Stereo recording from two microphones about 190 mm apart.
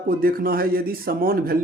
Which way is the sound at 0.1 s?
50° right (ahead or behind).